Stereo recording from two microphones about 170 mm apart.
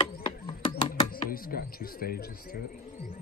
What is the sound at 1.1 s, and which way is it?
Speech, 60° left (ahead or behind).